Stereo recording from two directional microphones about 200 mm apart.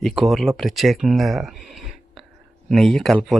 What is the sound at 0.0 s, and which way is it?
Speech, centre (ahead or behind).